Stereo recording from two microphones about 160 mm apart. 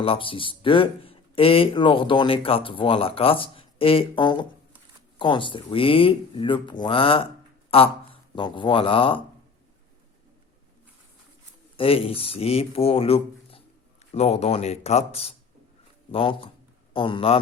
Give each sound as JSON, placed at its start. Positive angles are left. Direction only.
{"t": 0.0, "sound": "a man's voice", "side_deg": 35}
{"t": 11.8, "sound": "a man's voice", "side_deg": 35}